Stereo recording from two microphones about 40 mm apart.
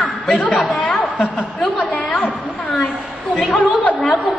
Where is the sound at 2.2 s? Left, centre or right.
Left.